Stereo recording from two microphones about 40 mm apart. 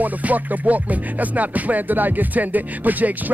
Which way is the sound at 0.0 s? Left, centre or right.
Right.